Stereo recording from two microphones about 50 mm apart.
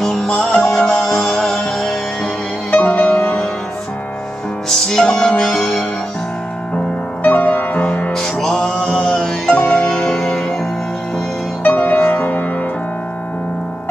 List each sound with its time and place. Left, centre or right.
0.0 s music: centre
2.7 s music: left
4.6 s music: centre
7.2 s music: left
8.1 s music: centre
11.6 s music: left